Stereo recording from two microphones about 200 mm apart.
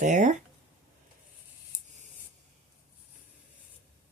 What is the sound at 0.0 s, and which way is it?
Speech, 35° right (ahead or behind).